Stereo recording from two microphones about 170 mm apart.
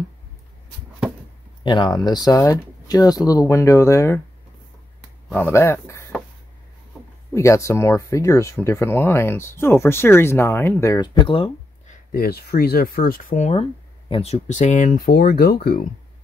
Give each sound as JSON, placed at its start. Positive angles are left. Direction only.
{"t": 1.6, "sound": "speech", "side_deg": 25}
{"t": 5.3, "sound": "speech", "side_deg": 10}
{"t": 7.3, "sound": "speech", "side_deg": 15}
{"t": 11.2, "sound": "speech", "side_deg": 30}
{"t": 12.1, "sound": "speech", "side_deg": 65}